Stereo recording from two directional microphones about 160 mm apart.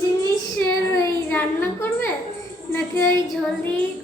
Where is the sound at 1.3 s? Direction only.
15° left (ahead or behind).